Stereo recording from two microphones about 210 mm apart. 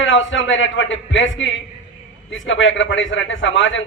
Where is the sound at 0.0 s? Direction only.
65° left (ahead or behind).